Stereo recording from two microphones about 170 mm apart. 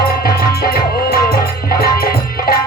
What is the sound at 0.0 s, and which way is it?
Music, 60° left (ahead or behind).